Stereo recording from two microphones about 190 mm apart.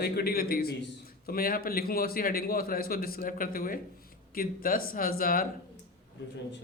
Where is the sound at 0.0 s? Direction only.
55° left (ahead or behind).